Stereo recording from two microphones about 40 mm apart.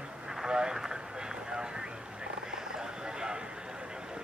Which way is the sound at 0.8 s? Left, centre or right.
Centre.